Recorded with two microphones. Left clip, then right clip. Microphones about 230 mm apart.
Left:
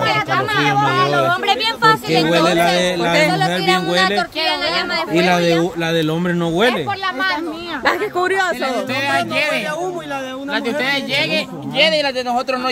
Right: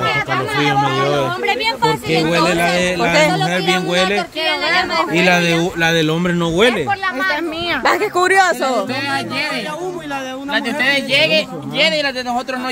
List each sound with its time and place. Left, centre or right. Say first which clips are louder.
0.8 s speech: left 2 dB; centre
2.4 s speech: left 1 dB; centre
4.5 s speech: right 2 dB; centre
5.1 s speech: left 1 dB; right
7.8 s speech: right 2 dB; centre
10.5 s speech: right 3 dB; centre